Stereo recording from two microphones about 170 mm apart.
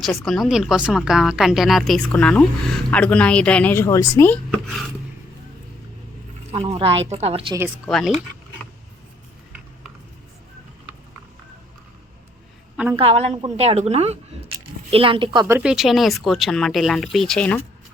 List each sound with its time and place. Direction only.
0.0 s speech: centre (ahead or behind)
6.5 s a woman's voice: 35° right (ahead or behind)
7.9 s speech: centre (ahead or behind)
12.7 s a woman's voice: 10° right (ahead or behind)
13.0 s a woman's voice: 35° right (ahead or behind)
15.4 s speech: 10° right (ahead or behind)